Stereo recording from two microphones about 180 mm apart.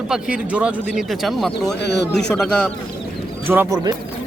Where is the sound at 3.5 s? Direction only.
15° right (ahead or behind).